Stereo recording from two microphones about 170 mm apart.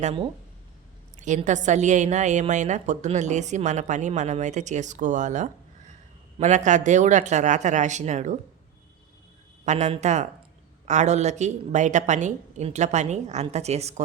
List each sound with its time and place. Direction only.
0.0 s speech: 35° right (ahead or behind)
1.5 s a woman's voice: 45° right (ahead or behind)
9.6 s a woman's voice: 40° right (ahead or behind)